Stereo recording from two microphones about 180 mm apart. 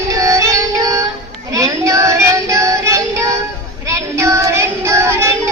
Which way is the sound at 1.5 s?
20° right (ahead or behind).